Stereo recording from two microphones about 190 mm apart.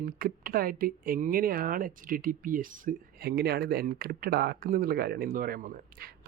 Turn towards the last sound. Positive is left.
turn(degrees=-50)  # may be behind; listen again after turning